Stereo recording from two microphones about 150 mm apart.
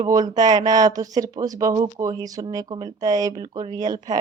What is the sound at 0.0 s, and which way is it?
Speech, 25° right (ahead or behind).